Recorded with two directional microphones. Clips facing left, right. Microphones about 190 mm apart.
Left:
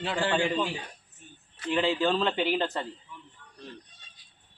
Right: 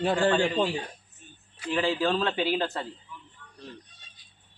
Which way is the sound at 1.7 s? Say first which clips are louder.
Even; centre (ahead or behind).